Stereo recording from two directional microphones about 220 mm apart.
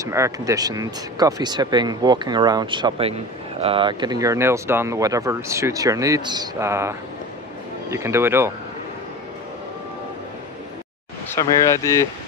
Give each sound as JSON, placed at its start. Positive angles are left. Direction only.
{"t": 0.0, "sound": "speech", "side_deg": -15}
{"t": 11.2, "sound": "speech", "side_deg": 15}